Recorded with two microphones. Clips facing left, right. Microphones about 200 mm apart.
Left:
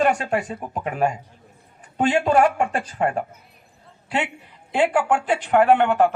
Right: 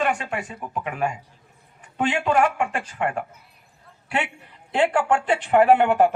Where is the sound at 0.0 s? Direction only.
40° left (ahead or behind).